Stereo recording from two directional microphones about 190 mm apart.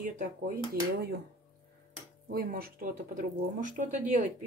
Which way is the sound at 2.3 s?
50° right (ahead or behind).